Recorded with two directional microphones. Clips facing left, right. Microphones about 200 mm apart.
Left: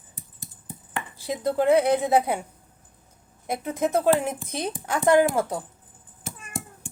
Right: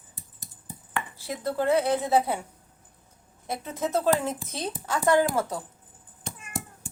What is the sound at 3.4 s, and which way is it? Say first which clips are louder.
Speech: left 5 dB; 15° left (ahead or behind).